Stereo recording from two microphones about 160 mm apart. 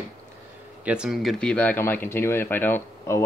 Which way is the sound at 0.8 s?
5° right (ahead or behind).